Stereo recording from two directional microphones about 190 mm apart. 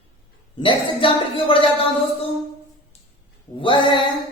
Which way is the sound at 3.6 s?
25° left (ahead or behind).